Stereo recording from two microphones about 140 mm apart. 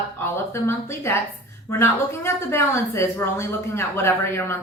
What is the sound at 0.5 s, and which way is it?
Speech, 20° left (ahead or behind).